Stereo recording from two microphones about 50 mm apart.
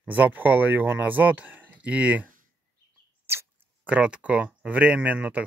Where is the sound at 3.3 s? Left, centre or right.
Right.